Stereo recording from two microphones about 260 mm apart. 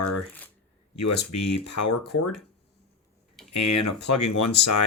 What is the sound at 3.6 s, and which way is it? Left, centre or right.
Speech, left.